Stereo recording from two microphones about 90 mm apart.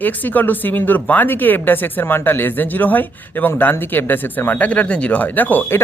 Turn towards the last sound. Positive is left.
turn(degrees=25)  # may be behind; listen again after turning